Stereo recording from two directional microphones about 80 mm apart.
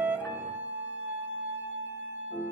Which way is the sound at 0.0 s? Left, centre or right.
Right.